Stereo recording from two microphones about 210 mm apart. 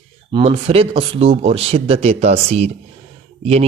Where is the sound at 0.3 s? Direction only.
25° right (ahead or behind).